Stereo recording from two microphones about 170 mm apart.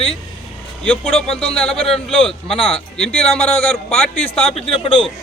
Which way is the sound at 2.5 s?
35° left (ahead or behind).